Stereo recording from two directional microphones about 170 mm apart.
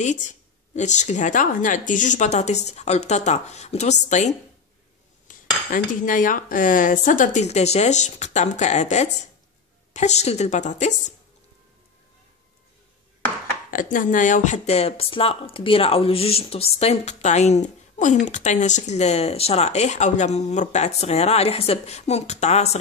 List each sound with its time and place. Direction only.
0.0 s speech: 45° left (ahead or behind)
13.7 s speech: 50° left (ahead or behind)